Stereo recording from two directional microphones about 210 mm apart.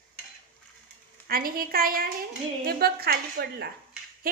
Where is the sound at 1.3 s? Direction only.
45° right (ahead or behind).